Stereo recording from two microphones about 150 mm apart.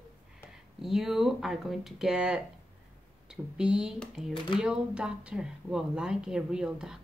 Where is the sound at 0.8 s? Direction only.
Centre (ahead or behind).